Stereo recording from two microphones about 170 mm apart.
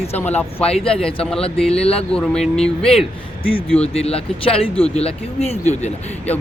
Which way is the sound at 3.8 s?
35° left (ahead or behind).